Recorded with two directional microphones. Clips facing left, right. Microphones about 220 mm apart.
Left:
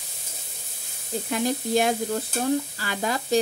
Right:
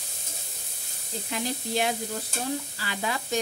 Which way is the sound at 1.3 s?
50° left (ahead or behind).